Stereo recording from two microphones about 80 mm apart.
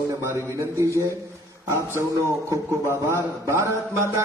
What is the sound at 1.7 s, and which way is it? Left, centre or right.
A man's voice, right.